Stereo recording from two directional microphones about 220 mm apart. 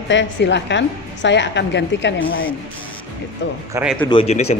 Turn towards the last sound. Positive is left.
turn(degrees=30)  # may be behind; listen again after turning